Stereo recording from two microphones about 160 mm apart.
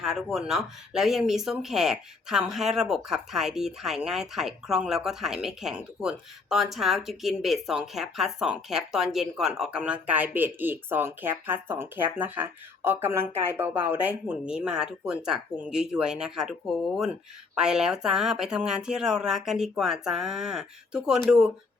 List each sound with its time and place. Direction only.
0.0 s speech: 5° right (ahead or behind)